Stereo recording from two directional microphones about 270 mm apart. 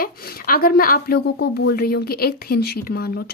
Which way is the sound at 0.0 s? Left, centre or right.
Left.